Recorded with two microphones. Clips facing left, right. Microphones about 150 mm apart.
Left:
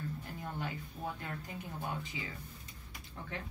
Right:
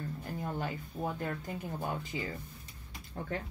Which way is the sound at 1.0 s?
55° right (ahead or behind).